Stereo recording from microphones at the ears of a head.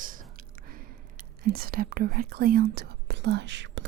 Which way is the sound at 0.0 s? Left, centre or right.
Right.